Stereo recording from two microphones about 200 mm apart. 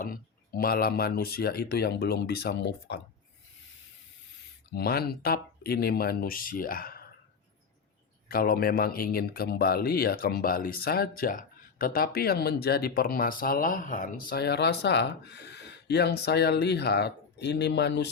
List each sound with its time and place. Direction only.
0.0 s speech: 45° left (ahead or behind)
4.7 s speech: 50° left (ahead or behind)
8.3 s speech: 45° left (ahead or behind)